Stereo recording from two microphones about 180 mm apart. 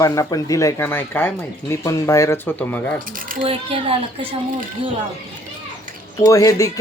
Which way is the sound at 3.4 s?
30° right (ahead or behind).